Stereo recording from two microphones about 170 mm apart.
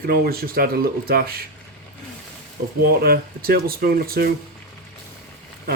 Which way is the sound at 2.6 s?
60° right (ahead or behind).